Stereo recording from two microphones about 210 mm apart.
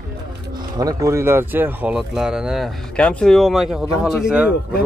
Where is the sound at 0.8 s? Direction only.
15° right (ahead or behind).